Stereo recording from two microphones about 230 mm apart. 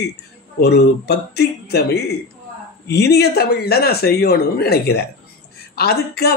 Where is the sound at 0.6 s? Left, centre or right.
Left.